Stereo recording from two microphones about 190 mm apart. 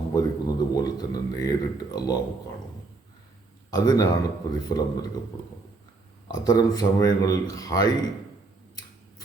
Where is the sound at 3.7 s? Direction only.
20° left (ahead or behind).